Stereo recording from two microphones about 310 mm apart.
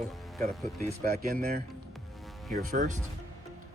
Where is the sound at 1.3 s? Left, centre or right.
Right.